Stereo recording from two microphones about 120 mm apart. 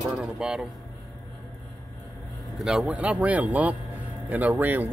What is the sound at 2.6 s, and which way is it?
Speech, 10° right (ahead or behind).